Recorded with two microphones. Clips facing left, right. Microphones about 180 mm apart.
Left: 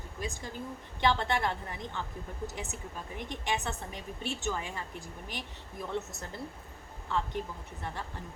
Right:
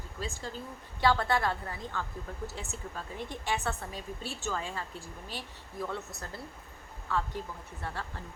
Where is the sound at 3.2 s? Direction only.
20° left (ahead or behind).